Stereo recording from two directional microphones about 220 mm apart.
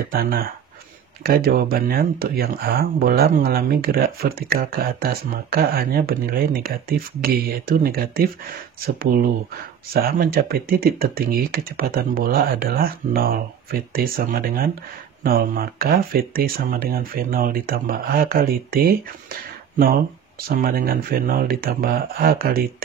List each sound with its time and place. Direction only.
0.1 s speech: 45° right (ahead or behind)